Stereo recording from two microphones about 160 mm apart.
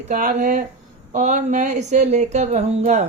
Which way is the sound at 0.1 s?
55° right (ahead or behind).